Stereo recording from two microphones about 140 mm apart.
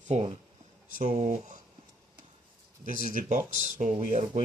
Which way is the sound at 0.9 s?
85° right.